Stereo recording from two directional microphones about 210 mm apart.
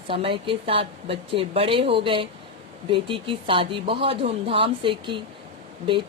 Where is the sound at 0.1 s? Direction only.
25° right (ahead or behind).